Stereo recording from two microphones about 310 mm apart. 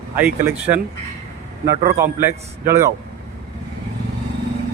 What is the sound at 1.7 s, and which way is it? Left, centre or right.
Speech, centre.